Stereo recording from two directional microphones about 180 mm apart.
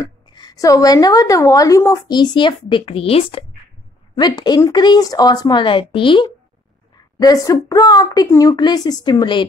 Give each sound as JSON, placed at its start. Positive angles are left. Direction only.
{"t": 0.0, "sound": "a woman's voice", "side_deg": 25}